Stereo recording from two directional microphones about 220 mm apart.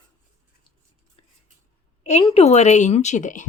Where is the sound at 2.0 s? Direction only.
30° left (ahead or behind).